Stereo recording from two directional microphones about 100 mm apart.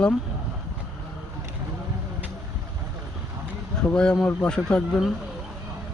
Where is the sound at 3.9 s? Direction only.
5° left (ahead or behind).